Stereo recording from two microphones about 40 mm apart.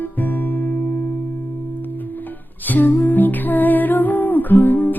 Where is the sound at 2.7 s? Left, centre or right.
Left.